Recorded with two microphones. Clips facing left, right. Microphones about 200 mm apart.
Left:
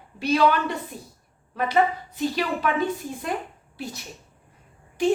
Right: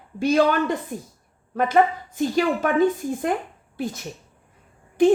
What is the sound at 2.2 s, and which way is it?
A woman's voice, 45° right (ahead or behind).